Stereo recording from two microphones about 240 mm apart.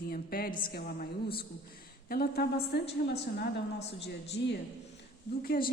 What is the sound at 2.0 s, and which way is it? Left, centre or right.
Speech, left.